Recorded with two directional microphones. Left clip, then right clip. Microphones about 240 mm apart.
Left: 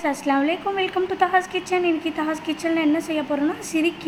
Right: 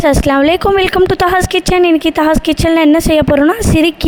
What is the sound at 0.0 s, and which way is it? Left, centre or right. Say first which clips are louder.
Speech: right 12 dB; right.